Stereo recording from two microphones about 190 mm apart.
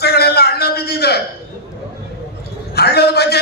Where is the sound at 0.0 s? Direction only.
55° left (ahead or behind).